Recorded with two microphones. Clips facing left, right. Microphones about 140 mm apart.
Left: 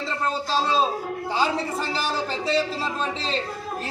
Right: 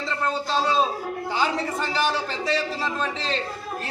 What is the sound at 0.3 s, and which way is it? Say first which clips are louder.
A woman's voice: even; 30° left (ahead or behind).